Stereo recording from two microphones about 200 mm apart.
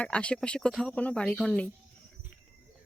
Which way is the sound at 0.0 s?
5° left (ahead or behind).